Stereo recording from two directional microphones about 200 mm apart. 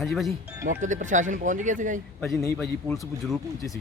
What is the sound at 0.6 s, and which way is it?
Speech, 40° right (ahead or behind).